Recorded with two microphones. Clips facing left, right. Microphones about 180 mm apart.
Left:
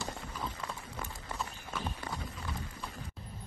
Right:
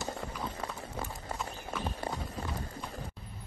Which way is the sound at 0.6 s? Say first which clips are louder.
Right 3 dB; 30° right (ahead or behind).